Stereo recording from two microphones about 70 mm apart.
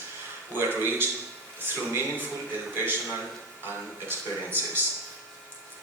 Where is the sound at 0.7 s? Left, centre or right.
Right.